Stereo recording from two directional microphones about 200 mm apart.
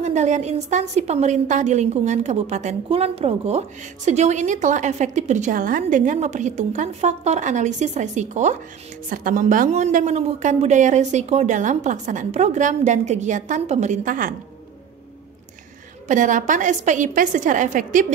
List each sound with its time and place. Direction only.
0.0 s a woman's voice: 35° right (ahead or behind)
16.1 s a woman's voice: 40° right (ahead or behind)